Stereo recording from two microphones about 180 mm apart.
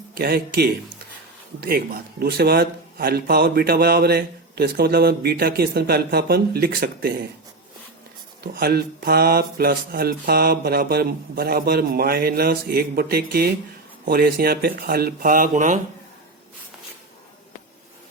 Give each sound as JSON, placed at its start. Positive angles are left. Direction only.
{"t": 0.1, "sound": "a man's voice", "side_deg": -55}
{"t": 8.5, "sound": "a man's voice", "side_deg": -60}